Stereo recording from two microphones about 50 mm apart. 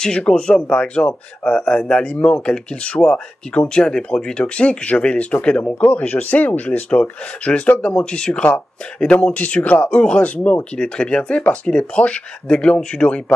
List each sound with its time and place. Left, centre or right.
0.0 s speech: centre
2.1 s speech: left
2.4 s speech: centre
9.8 s speech: left